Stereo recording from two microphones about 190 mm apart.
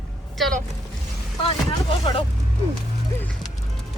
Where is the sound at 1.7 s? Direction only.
25° left (ahead or behind).